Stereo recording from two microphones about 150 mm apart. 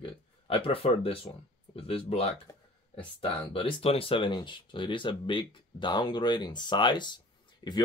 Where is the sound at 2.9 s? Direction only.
40° left (ahead or behind).